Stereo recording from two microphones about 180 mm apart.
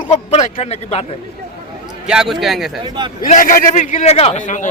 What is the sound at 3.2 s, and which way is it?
A man's voice, 50° left (ahead or behind).